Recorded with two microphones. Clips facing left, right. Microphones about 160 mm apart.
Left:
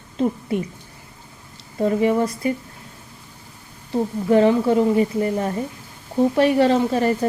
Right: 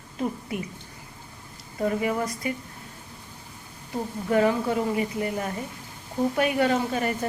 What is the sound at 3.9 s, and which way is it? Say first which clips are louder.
A woman's voice: left 8 dB; 30° left (ahead or behind).